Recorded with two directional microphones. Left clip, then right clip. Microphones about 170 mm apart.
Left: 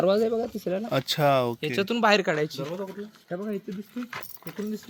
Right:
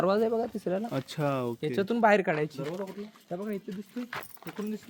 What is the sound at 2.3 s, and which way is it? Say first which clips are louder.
Speech: left 3 dB; 20° right (ahead or behind).